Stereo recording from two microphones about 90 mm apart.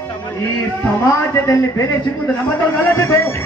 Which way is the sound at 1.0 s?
35° left (ahead or behind).